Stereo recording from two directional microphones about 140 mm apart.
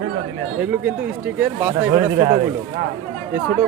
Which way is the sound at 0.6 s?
10° right (ahead or behind).